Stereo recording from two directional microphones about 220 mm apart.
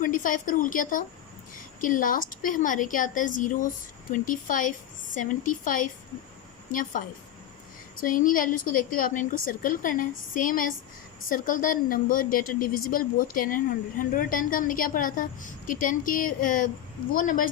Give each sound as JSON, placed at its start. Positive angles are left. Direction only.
{"t": 0.0, "sound": "a woman's voice", "side_deg": 35}
{"t": 8.0, "sound": "a woman's voice", "side_deg": 40}